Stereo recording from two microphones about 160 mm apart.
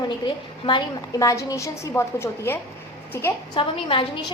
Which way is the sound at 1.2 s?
20° left (ahead or behind).